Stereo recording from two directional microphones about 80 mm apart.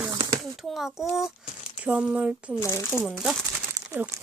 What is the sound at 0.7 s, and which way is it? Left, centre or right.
Speech, centre.